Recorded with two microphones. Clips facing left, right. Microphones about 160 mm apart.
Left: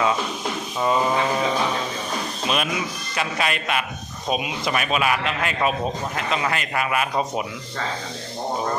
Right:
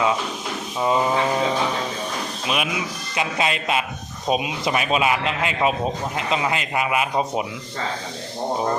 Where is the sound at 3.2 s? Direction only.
20° right (ahead or behind).